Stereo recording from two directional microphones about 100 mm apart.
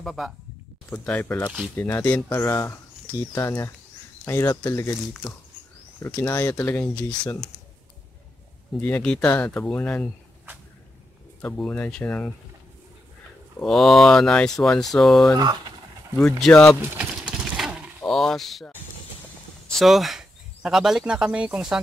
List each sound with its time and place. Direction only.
0.0 s speech: centre (ahead or behind)
1.0 s speech: 15° left (ahead or behind); by 4.9 s 30° left (ahead or behind)
6.0 s speech: 15° left (ahead or behind)
8.8 s speech: 15° left (ahead or behind)
11.4 s speech: 10° left (ahead or behind)
13.6 s speech: 5° left (ahead or behind)
15.3 s speech: 45° right (ahead or behind)
16.2 s speech: 5° left (ahead or behind)
17.0 s a sound: 5° right (ahead or behind)
18.0 s speech: 5° left (ahead or behind)
19.7 s speech: centre (ahead or behind)